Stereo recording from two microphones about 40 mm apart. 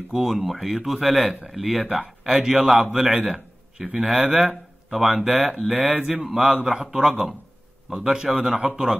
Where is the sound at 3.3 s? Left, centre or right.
Centre.